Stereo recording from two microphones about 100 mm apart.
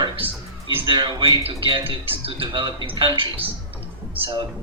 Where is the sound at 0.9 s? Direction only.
55° right (ahead or behind).